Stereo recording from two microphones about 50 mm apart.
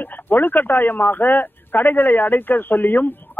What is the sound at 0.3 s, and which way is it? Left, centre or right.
Speech, left.